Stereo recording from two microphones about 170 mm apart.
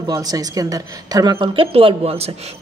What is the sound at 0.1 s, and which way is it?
A woman's voice, 20° right (ahead or behind).